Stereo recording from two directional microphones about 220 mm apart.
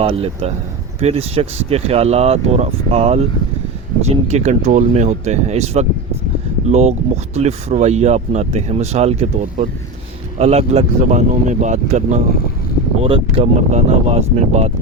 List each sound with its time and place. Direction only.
0.0 s speech: 25° right (ahead or behind)